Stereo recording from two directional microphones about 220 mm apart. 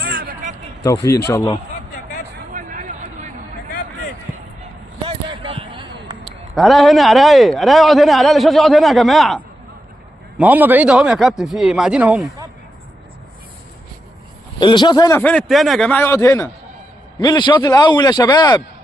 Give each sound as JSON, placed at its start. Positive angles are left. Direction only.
{"t": 0.0, "sound": "a sound", "side_deg": -45}
{"t": 0.9, "sound": "a man's voice", "side_deg": 15}
{"t": 2.5, "sound": "a sound", "side_deg": -35}
{"t": 5.0, "sound": "basketball bounce", "side_deg": -25}
{"t": 6.5, "sound": "a man's voice", "side_deg": 0}
{"t": 14.6, "sound": "a man's voice", "side_deg": 20}